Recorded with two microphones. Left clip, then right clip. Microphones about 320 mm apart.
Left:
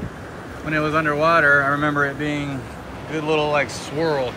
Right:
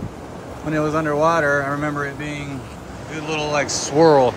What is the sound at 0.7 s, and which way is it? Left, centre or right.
Speech, centre.